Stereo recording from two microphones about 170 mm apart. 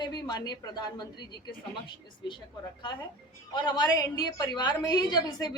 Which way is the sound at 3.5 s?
25° left (ahead or behind).